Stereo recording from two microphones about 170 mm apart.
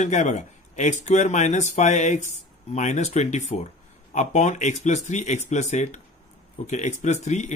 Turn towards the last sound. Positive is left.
turn(degrees=45)  # may be behind; listen again after turning